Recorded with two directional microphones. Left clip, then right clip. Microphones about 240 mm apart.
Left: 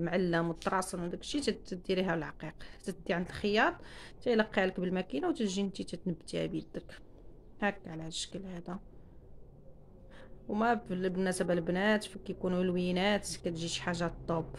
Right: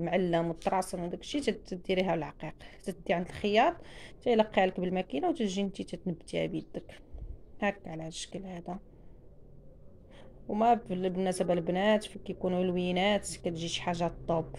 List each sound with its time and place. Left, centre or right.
0.0 s speech: left
0.3 s speech: centre
10.1 s a sound: centre
10.9 s speech: centre